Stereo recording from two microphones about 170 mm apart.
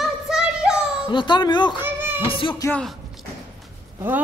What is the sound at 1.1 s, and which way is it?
Speech, 25° left (ahead or behind).